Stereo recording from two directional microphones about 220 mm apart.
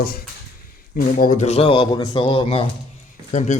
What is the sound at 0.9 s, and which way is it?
Speech, 35° left (ahead or behind).